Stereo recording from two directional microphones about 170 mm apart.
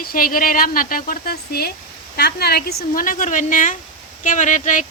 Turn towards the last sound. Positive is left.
turn(degrees=45)  # may be behind; listen again after turning